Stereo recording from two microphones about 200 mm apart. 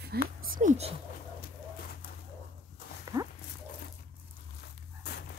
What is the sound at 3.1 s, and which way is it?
Dog, 15° right (ahead or behind).